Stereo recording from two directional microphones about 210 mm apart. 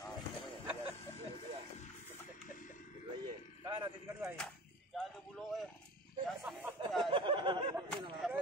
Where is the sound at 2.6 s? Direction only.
40° left (ahead or behind).